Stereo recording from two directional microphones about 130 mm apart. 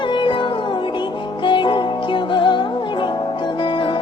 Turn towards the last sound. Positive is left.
turn(degrees=40)  # may be behind; listen again after turning